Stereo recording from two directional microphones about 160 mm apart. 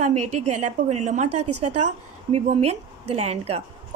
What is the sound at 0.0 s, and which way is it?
A woman's voice, 45° right (ahead or behind).